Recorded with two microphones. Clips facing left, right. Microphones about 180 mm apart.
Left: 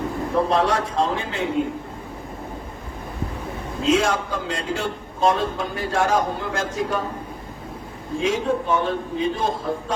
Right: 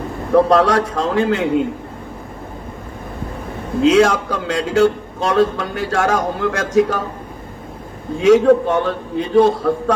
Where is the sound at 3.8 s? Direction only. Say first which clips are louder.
Right 7 dB; 75° right (ahead or behind).